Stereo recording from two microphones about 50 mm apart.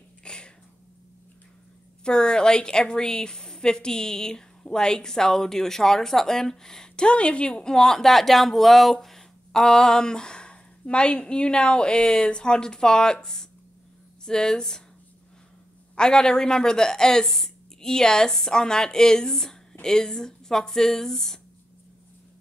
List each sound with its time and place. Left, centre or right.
0.2 s a sound: centre
2.0 s a woman's voice: centre
16.0 s a woman's voice: centre